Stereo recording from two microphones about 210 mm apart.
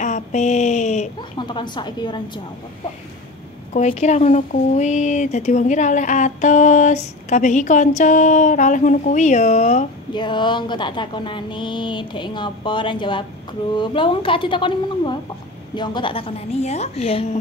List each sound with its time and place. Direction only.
0.0 s a sound: 35° left (ahead or behind)
1.4 s speech: 20° left (ahead or behind)
3.7 s speech: 35° left (ahead or behind)
10.1 s speech: 20° left (ahead or behind)